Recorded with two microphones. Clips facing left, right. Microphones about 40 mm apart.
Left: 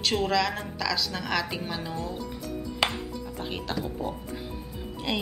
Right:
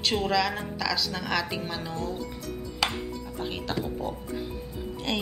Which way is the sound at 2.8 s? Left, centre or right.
Centre.